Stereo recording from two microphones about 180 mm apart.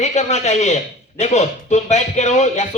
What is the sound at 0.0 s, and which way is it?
Speech, 40° left (ahead or behind).